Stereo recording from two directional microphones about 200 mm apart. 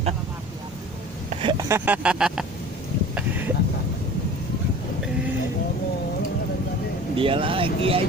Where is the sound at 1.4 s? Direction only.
20° right (ahead or behind); by 2.4 s 5° right (ahead or behind).